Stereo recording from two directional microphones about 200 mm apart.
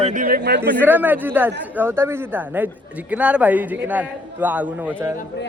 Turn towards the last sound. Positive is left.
turn(degrees=-10)  # may be behind; listen again after turning